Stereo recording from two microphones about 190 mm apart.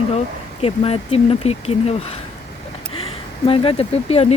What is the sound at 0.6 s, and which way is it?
Speech, 30° left (ahead or behind).